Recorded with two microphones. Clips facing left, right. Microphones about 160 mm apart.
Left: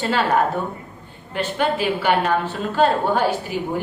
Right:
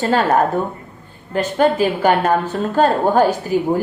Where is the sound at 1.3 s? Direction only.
40° right (ahead or behind).